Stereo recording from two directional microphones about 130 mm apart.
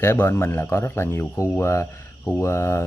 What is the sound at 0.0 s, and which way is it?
Speech, 15° left (ahead or behind).